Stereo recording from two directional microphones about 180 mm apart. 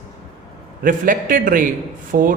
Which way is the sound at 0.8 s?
50° right (ahead or behind).